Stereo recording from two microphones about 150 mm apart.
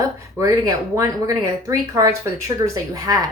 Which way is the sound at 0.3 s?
20° right (ahead or behind).